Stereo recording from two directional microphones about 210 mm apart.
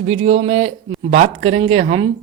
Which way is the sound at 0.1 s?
30° right (ahead or behind).